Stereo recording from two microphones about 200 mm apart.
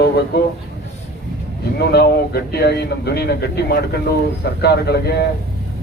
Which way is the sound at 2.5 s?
55° left (ahead or behind).